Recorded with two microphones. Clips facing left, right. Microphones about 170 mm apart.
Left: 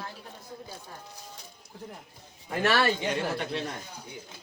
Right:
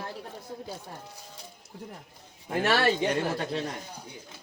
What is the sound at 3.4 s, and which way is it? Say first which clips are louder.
Speech: right 1 dB; 40° right (ahead or behind).